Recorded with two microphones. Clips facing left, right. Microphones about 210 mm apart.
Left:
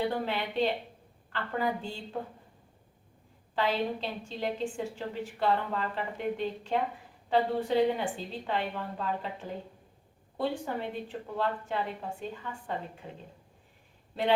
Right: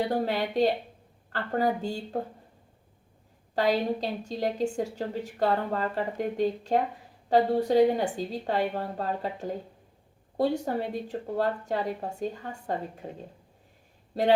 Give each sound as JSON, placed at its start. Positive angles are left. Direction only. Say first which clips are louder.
{"t": 0.1, "sound": "a woman's voice", "louder": "right 5 dB", "side_deg": -40}
{"t": 3.5, "sound": "a woman's voice", "louder": "right 4 dB", "side_deg": -40}